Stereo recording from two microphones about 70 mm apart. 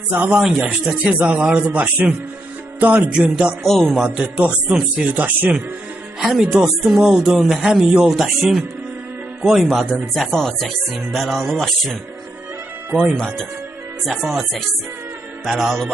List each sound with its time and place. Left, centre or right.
0.1 s speech: right
0.3 s speech: centre
0.9 s speech: centre
3.6 s speech: centre
4.0 s speech: centre
5.1 s speech: right
6.1 s speech: centre
10.2 s speech: centre
13.0 s speech: centre